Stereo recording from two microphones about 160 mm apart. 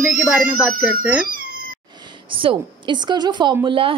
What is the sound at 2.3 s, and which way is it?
A woman's voice, 30° right (ahead or behind).